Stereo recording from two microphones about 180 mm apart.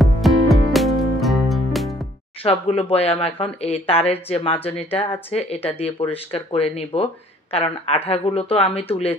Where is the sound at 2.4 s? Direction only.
35° left (ahead or behind).